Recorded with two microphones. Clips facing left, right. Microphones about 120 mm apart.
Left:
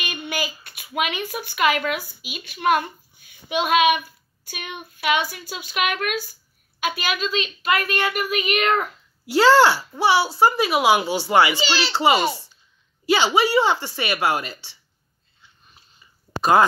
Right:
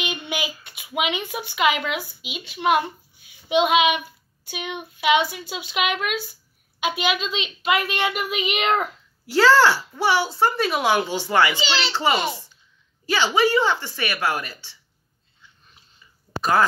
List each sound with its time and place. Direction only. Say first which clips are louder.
0.3 s a woman's voice: even; 15° right (ahead or behind)
9.2 s a woman's voice: left 1 dB; 15° left (ahead or behind)
16.3 s a sound: left 3 dB; 20° left (ahead or behind)